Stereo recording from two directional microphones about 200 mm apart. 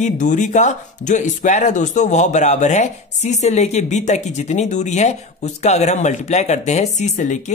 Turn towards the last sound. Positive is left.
turn(degrees=35)  # may be behind; listen again after turning